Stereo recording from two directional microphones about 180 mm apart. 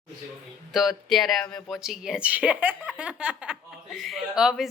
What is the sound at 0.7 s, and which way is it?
Speech, centre (ahead or behind).